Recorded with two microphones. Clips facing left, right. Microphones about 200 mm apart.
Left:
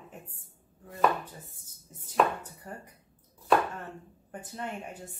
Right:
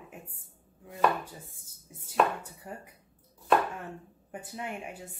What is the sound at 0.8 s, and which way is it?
Chopping, 5° right (ahead or behind).